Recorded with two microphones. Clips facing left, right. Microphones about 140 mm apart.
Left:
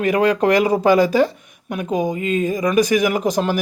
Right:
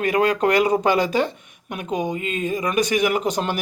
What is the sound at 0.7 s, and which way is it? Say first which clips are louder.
Speech: left 4 dB; 40° left (ahead or behind).